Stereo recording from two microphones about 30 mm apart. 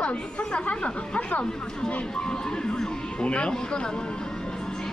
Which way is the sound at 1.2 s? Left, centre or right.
Left.